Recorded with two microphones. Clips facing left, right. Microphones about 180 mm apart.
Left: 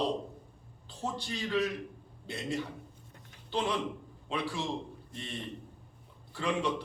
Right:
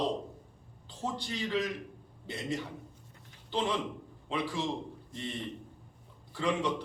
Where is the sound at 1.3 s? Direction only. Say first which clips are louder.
Left 2 dB; 15° right (ahead or behind).